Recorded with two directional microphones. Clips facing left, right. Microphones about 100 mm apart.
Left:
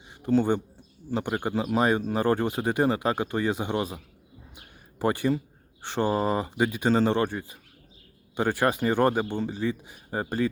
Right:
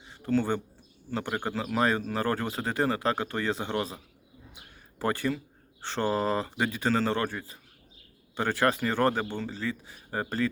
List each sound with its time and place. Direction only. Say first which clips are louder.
0.2 s speech: left 4 dB; 20° left (ahead or behind)